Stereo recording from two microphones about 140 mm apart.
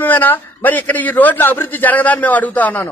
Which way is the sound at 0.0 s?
15° left (ahead or behind).